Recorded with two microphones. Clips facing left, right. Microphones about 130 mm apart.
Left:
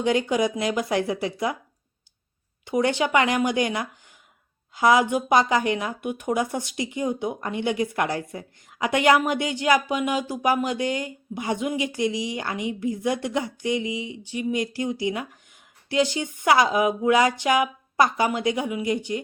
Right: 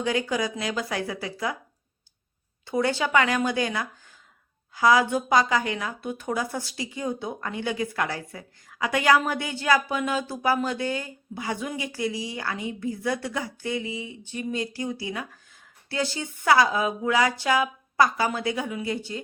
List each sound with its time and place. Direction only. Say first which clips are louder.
0.0 s speech: left 4 dB; 20° left (ahead or behind)
2.6 s speech: left 2 dB; 20° left (ahead or behind)